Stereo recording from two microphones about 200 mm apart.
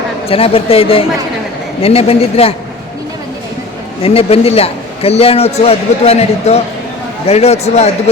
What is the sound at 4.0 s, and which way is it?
A man's voice, 30° left (ahead or behind).